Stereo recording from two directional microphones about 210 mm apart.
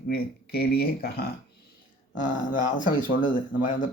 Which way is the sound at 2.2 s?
40° left (ahead or behind).